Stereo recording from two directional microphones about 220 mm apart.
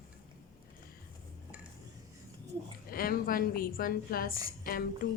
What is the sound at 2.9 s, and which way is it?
A woman's voice, 40° left (ahead or behind).